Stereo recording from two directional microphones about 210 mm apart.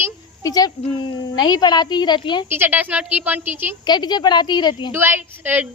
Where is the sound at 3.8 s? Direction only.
20° left (ahead or behind).